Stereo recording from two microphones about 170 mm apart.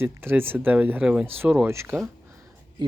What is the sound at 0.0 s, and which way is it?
Speech, 15° right (ahead or behind).